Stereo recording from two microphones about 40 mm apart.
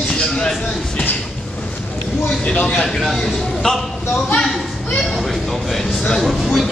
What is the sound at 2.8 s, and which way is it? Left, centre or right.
Speech, centre.